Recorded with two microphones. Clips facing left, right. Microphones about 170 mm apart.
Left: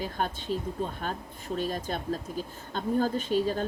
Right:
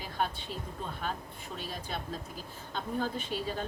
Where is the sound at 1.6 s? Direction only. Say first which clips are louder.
Left 8 dB; 45° left (ahead or behind).